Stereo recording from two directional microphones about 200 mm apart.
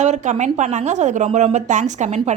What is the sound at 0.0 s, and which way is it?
Speech, 35° right (ahead or behind).